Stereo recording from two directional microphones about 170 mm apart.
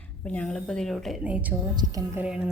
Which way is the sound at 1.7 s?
20° right (ahead or behind).